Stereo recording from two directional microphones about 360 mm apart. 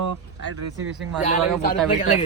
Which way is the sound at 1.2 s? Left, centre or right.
Left.